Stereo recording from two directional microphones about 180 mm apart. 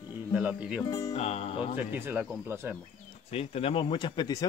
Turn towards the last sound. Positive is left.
turn(degrees=20)  # may be behind; listen again after turning